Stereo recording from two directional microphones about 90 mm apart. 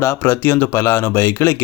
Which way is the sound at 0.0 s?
30° left (ahead or behind).